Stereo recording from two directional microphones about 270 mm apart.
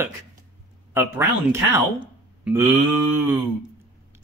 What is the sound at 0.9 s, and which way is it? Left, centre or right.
Speech, centre.